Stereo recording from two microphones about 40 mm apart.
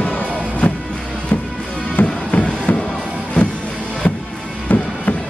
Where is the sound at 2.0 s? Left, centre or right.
Left.